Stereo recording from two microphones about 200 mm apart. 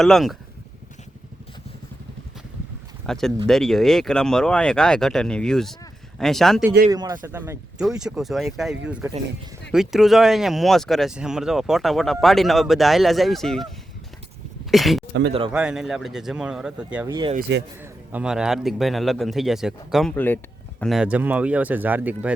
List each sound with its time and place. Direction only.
0.0 s a man's voice: centre (ahead or behind)
3.1 s a man's voice: centre (ahead or behind)
6.9 s a man's voice: 20° right (ahead or behind)
17.1 s speech: 20° right (ahead or behind)
17.7 s a man's voice: 5° right (ahead or behind)